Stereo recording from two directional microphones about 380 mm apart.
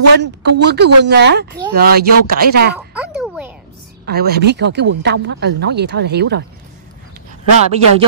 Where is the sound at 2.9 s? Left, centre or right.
Centre.